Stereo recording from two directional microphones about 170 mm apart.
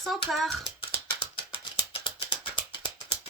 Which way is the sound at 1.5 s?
30° left (ahead or behind).